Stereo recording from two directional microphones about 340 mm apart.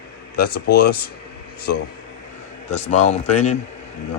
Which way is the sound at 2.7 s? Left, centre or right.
Centre.